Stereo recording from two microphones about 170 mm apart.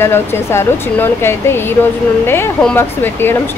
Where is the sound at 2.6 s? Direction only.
10° left (ahead or behind).